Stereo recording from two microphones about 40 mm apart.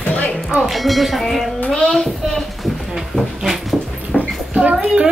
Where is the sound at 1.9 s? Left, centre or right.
Centre.